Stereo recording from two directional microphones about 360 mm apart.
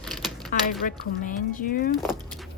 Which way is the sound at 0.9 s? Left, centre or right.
Left.